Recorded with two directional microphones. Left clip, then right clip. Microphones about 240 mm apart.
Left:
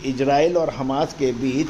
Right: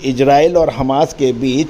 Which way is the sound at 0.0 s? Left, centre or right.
Right.